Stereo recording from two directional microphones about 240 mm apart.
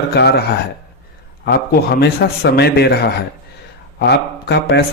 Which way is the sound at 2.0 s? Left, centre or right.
Left.